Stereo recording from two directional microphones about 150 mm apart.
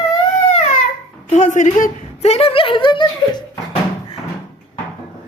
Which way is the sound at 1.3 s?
55° left (ahead or behind).